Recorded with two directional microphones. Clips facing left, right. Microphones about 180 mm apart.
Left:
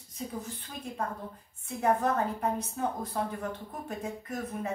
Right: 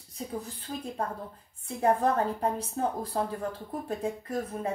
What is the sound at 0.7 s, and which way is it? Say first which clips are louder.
A woman's voice: right 3 dB; 35° right (ahead or behind).